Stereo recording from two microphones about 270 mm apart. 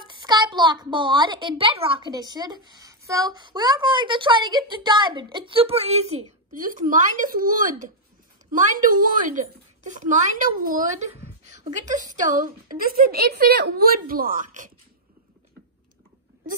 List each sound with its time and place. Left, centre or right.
0.0 s a child's voice: centre